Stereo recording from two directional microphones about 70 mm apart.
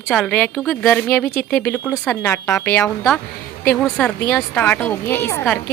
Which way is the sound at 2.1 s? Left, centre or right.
Left.